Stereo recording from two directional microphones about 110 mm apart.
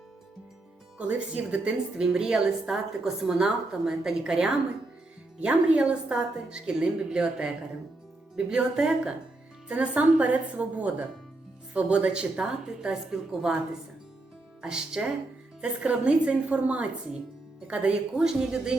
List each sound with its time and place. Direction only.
0.9 s a woman's voice: 10° right (ahead or behind)
14.6 s a woman's voice: 10° right (ahead or behind)